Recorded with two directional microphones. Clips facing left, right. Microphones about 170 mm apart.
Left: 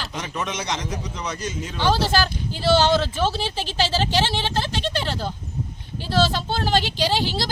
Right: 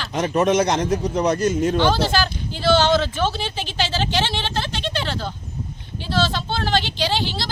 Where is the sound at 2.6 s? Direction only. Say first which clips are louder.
Right 1 dB; 35° left (ahead or behind).